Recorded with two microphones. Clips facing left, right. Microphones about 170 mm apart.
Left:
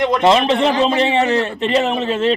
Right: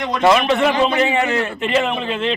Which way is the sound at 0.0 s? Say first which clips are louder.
Left 2 dB; 25° left (ahead or behind).